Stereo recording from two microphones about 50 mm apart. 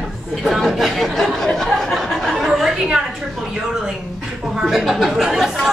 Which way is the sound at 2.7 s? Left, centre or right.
Centre.